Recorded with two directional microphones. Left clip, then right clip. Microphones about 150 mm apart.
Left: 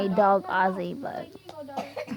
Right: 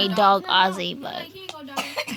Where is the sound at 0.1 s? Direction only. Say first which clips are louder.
Right 1 dB; 25° right (ahead or behind).